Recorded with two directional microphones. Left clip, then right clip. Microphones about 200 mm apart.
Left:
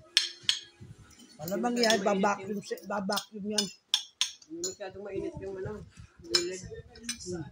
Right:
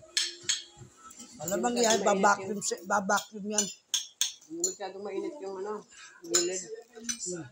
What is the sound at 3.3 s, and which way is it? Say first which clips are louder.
Cutlery: even; 15° left (ahead or behind).